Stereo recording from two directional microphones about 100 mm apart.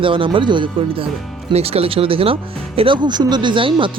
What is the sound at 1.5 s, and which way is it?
Speech, 85° right.